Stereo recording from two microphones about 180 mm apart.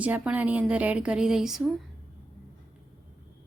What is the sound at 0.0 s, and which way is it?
Speech, 10° right (ahead or behind).